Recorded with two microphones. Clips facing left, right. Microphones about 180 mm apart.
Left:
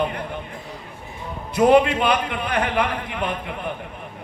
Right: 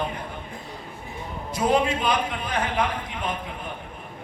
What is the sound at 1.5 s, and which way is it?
A man's voice, 65° left (ahead or behind).